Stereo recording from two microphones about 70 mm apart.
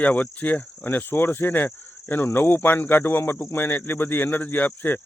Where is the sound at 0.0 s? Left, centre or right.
Left.